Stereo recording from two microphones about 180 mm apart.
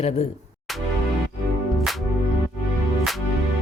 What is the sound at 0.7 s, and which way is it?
Music, centre (ahead or behind).